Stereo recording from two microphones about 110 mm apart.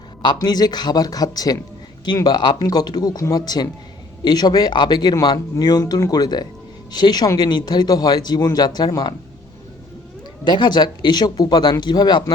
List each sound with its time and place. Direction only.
0.2 s a man's voice: 40° left (ahead or behind)
10.4 s a man's voice: 40° left (ahead or behind)